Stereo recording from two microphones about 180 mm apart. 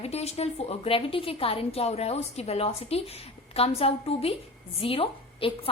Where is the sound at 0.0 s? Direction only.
35° left (ahead or behind).